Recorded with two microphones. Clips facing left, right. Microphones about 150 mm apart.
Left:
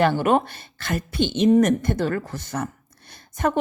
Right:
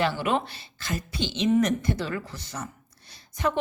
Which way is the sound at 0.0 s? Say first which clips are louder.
Left 6 dB; 50° left (ahead or behind).